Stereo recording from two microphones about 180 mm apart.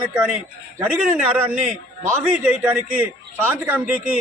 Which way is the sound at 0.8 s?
10° right (ahead or behind).